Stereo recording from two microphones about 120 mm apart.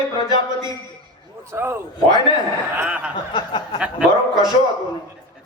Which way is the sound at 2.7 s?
10° right (ahead or behind).